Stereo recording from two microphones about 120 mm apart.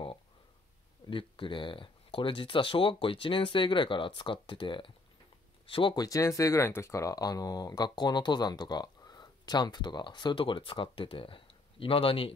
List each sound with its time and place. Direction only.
1.1 s speech: 45° left (ahead or behind)
5.9 s speech: 30° left (ahead or behind); by 12.3 s 50° left (ahead or behind)